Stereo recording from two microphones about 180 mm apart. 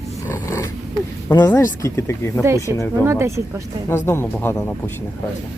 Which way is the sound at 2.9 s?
15° right (ahead or behind).